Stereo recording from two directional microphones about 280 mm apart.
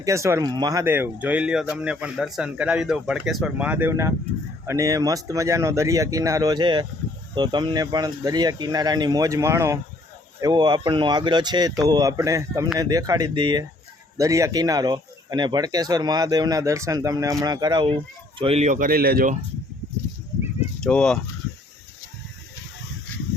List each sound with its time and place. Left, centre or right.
0.0 s speech: centre; by 19.4 s right
20.8 s speech: centre